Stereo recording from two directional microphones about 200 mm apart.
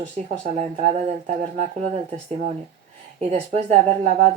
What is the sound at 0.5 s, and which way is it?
A woman's voice, 35° right (ahead or behind).